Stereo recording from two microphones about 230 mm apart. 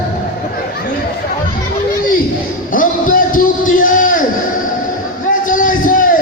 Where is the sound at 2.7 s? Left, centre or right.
Left.